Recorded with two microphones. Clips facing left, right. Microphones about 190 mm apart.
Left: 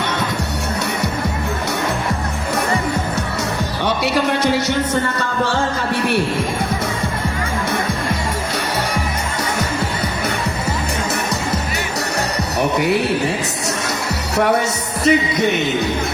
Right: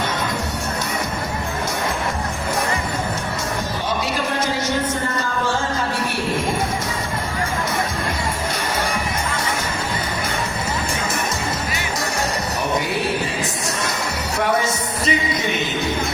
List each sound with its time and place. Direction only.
3.8 s music: 70° left (ahead or behind)
12.5 s music: 65° left (ahead or behind)
15.0 s speech: 65° left (ahead or behind)